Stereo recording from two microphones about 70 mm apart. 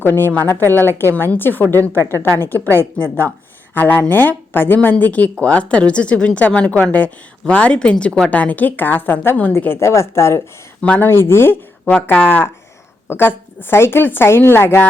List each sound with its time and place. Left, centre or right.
0.0 s a woman's voice: left
9.8 s a woman's voice: left
10.8 s speech: centre
11.0 s a woman's voice: left
13.1 s a woman's voice: left